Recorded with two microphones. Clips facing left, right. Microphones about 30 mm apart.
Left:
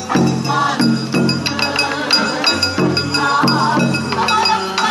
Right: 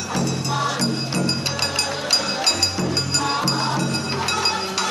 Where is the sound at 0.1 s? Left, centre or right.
Left.